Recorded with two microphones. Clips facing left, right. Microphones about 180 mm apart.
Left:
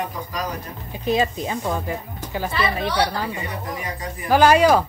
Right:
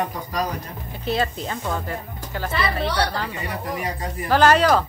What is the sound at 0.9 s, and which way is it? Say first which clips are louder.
Speech: left 3 dB; 15° left (ahead or behind).